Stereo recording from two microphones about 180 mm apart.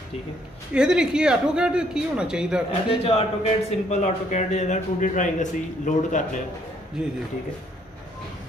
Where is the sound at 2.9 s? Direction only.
35° left (ahead or behind).